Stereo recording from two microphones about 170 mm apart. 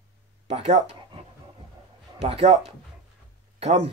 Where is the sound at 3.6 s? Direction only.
40° right (ahead or behind).